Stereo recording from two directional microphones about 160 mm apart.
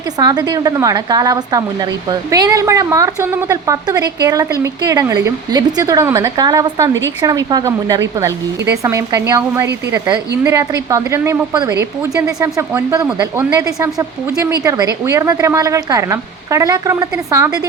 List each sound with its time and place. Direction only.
0.2 s speech: 25° right (ahead or behind)